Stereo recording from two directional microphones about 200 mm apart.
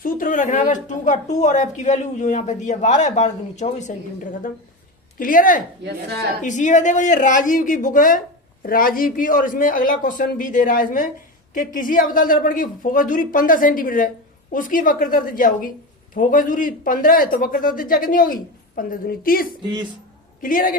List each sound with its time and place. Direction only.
0.0 s a woman's voice: 40° left (ahead or behind)
5.8 s a woman's voice: 60° right (ahead or behind)
6.4 s a woman's voice: 40° left (ahead or behind)